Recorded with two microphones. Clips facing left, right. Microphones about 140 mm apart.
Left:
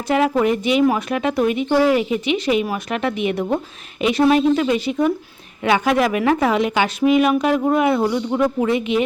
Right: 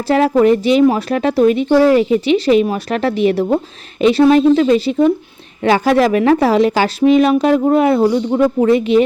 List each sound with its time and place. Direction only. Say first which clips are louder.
0.1 s speech: right 6 dB; 35° right (ahead or behind)